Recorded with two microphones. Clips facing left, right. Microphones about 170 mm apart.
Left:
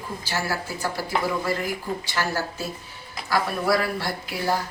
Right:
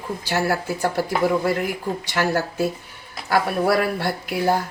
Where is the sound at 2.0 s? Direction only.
60° right (ahead or behind).